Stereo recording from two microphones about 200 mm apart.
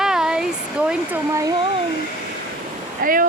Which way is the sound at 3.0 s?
45° right (ahead or behind).